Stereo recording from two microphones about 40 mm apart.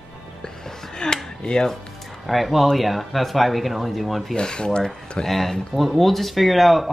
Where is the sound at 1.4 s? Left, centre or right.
Left.